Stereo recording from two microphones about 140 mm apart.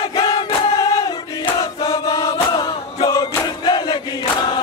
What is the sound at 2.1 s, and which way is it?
Chant, 25° left (ahead or behind).